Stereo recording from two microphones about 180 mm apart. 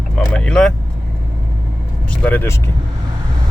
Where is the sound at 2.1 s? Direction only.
10° left (ahead or behind).